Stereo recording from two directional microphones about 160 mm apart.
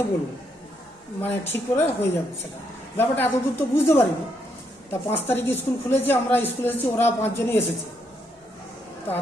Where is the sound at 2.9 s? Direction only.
15° left (ahead or behind).